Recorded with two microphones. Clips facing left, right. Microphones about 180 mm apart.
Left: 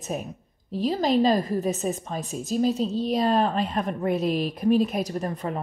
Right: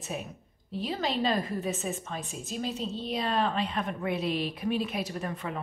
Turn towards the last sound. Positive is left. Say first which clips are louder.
# left 6 dB
turn(degrees=40)  # may be behind; listen again after turning